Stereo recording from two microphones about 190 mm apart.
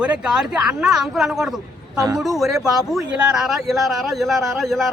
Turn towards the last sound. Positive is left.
turn(degrees=0)  # may be behind; listen again after turning